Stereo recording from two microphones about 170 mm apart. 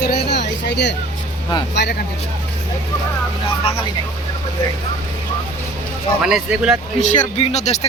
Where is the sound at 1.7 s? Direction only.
85° left.